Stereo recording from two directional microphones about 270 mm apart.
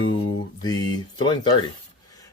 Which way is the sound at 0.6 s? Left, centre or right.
Centre.